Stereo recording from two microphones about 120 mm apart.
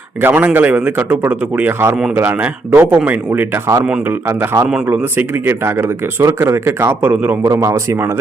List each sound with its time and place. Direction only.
0.2 s speech: 15° right (ahead or behind)
7.4 s speech: 25° right (ahead or behind)